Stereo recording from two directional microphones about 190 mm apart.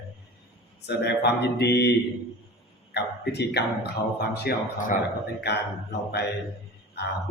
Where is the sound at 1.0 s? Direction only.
60° left (ahead or behind).